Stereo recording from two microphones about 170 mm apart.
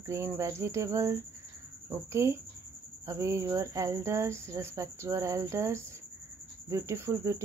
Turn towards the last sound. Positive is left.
turn(degrees=-15)  # may be behind; listen again after turning